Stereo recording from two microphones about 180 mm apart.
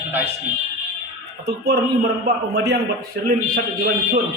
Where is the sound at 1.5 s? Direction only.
65° right (ahead or behind).